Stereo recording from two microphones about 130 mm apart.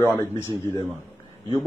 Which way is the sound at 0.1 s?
20° left (ahead or behind).